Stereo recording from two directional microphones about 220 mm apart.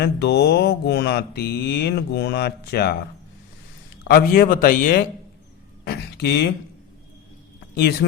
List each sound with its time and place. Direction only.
0.0 s speech: 50° left (ahead or behind)
4.1 s a man's voice: 40° left (ahead or behind)
5.8 s a sound: 45° left (ahead or behind)